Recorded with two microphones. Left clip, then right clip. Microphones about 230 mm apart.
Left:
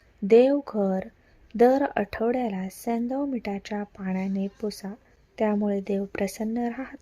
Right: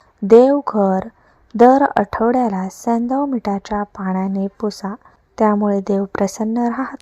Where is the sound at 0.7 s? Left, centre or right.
Centre.